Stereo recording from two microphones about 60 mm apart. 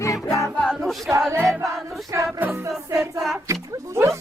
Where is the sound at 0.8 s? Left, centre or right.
Centre.